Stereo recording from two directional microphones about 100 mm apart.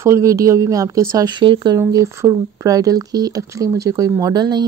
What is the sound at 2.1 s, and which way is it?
A woman's voice, 30° right (ahead or behind).